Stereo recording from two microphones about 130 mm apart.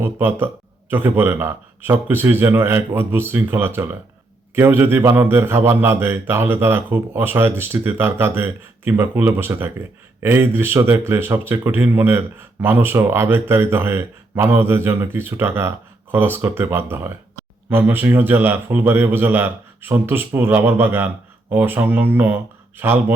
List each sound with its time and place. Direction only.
0.0 s speech: 15° right (ahead or behind)